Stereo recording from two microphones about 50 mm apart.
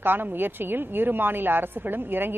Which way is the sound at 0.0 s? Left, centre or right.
Right.